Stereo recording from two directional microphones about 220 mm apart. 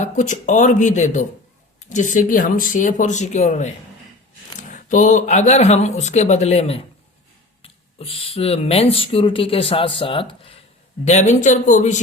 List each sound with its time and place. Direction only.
0.0 s speech: 35° left (ahead or behind)
4.7 s speech: 35° left (ahead or behind)